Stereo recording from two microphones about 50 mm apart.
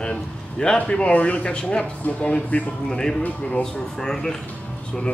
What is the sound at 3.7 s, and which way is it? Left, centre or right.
Speech, centre.